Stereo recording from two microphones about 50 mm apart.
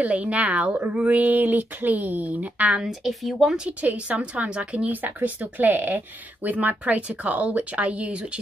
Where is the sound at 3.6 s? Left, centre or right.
Right.